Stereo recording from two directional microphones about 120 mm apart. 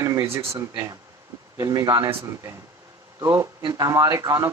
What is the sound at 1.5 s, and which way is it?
Speech, 30° right (ahead or behind).